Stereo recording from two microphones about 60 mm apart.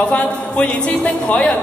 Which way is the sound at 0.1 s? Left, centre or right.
Centre.